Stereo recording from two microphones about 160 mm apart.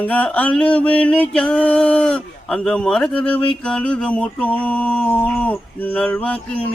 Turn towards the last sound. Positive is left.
turn(degrees=10)  # may be behind; listen again after turning